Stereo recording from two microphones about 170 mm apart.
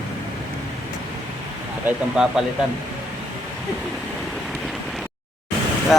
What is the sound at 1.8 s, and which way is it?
Speech, 5° right (ahead or behind).